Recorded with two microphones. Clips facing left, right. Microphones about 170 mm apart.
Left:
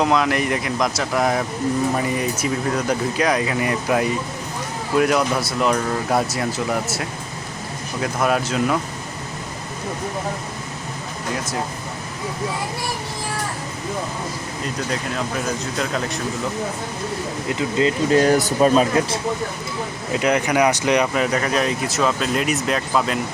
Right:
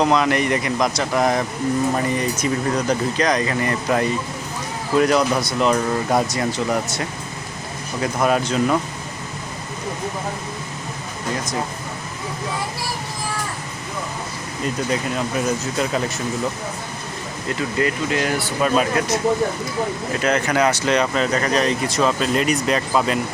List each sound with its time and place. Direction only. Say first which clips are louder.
0.0 s speech: right 1 dB; centre (ahead or behind)
15.8 s speech: right 1 dB; 5° right (ahead or behind)
17.5 s speech: left 2 dB; 20° left (ahead or behind)
18.1 s speech: left 6 dB; 40° left (ahead or behind)
20.1 s speech: left 2 dB; 15° left (ahead or behind); by 23.2 s centre (ahead or behind)